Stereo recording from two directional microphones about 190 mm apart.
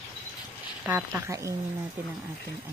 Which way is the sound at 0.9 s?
15° right (ahead or behind).